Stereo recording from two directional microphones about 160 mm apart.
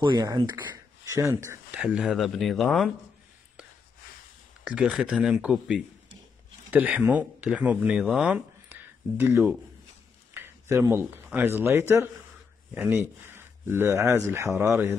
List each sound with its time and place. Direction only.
0.0 s speech: 25° right (ahead or behind)
1.1 s speech: 15° right (ahead or behind); by 2.9 s centre (ahead or behind)
4.6 s speech: 5° right (ahead or behind)